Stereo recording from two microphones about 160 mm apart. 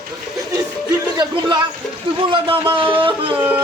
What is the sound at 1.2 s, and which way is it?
Speech, 30° right (ahead or behind).